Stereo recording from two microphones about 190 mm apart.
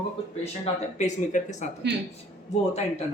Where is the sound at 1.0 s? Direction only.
40° left (ahead or behind).